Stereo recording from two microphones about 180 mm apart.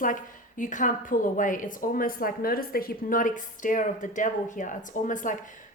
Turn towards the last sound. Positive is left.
turn(degrees=45)  # may be behind; listen again after turning